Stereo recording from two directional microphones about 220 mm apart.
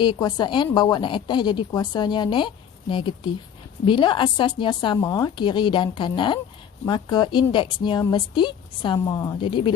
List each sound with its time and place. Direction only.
0.0 s a woman's voice: 20° left (ahead or behind)